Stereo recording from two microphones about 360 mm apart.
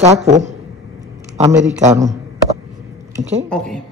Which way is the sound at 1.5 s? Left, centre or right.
Centre.